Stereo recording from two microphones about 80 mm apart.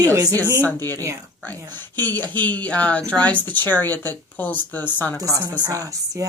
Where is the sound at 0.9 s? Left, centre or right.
Right.